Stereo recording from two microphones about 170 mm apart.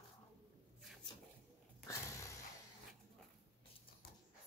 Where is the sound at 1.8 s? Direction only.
20° left (ahead or behind).